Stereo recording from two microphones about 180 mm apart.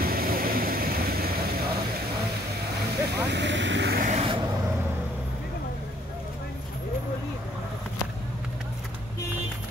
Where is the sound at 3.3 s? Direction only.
75° right (ahead or behind).